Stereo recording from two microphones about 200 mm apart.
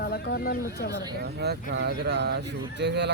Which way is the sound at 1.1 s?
55° right (ahead or behind).